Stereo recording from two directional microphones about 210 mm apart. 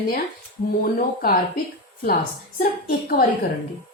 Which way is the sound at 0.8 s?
45° left (ahead or behind).